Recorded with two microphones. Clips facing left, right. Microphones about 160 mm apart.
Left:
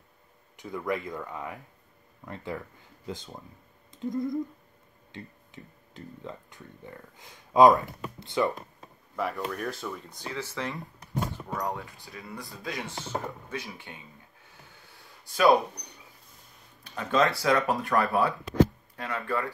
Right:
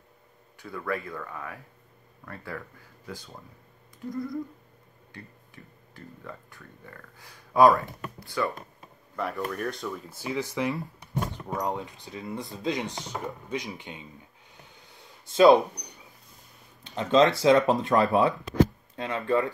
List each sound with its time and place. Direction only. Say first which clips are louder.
0.6 s speech: left 1 dB; 20° left (ahead or behind)
9.1 s speech: even; centre (ahead or behind); by 14.0 s 20° right (ahead or behind)
14.5 s a sound: right 1 dB; 20° right (ahead or behind)
16.8 s speech: right 5 dB; 20° right (ahead or behind)